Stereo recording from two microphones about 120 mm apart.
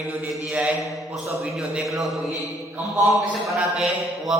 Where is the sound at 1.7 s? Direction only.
Centre (ahead or behind).